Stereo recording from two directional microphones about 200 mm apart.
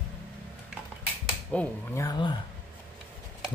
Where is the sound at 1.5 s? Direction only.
10° left (ahead or behind).